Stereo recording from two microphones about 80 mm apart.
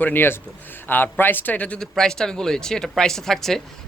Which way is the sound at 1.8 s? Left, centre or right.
Centre.